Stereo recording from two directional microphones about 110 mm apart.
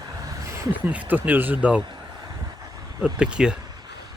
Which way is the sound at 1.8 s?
45° right (ahead or behind).